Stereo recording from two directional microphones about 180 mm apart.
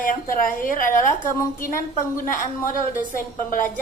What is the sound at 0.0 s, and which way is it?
A woman's voice, 50° left (ahead or behind).